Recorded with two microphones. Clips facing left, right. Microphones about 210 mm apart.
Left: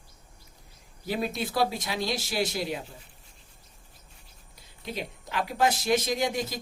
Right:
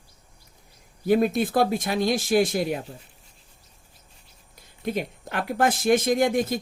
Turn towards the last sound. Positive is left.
turn(degrees=-50)  # may be behind; listen again after turning